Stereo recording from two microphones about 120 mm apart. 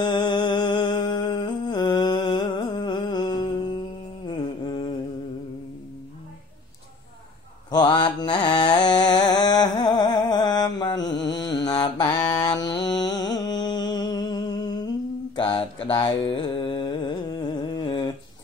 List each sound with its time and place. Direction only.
0.0 s music: 35° left (ahead or behind)
4.3 s humming: 40° left (ahead or behind)
7.7 s mantra: 40° left (ahead or behind)
12.3 s music: 35° left (ahead or behind)
15.3 s mantra: 45° left (ahead or behind)